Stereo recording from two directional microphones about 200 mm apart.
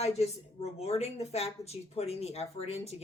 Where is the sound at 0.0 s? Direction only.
30° left (ahead or behind).